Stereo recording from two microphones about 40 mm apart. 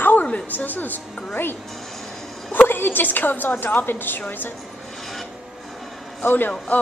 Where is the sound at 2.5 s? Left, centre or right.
Left.